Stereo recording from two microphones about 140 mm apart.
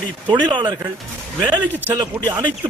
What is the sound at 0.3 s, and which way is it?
Speech, 35° right (ahead or behind).